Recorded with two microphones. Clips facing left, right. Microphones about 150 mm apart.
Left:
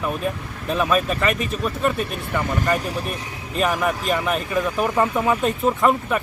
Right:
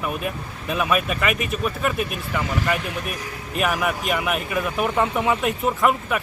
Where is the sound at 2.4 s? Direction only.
45° left (ahead or behind).